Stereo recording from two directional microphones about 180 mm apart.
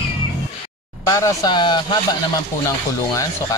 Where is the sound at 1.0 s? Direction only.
20° left (ahead or behind).